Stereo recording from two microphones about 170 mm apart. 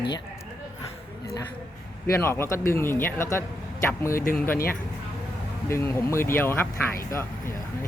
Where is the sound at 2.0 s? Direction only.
15° left (ahead or behind).